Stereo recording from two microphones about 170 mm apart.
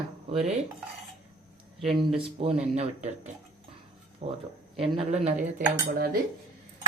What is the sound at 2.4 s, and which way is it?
A woman's voice, 40° right (ahead or behind).